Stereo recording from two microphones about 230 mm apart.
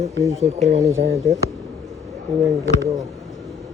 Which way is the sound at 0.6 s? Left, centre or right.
Right.